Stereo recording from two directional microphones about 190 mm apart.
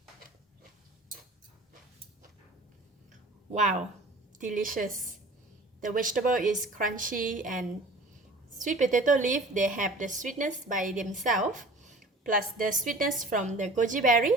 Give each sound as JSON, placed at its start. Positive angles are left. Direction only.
{"t": 3.5, "sound": "a woman's voice", "side_deg": -40}